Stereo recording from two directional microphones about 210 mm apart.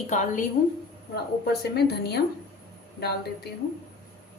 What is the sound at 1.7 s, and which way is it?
Speech, 50° left (ahead or behind).